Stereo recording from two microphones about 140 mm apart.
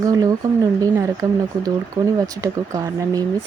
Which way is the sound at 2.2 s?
25° right (ahead or behind).